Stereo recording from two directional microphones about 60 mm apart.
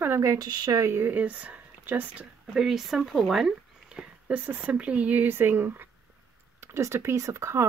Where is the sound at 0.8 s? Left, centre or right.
Right.